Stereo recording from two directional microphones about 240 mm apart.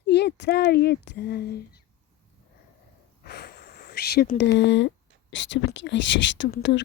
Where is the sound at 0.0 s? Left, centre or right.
Left.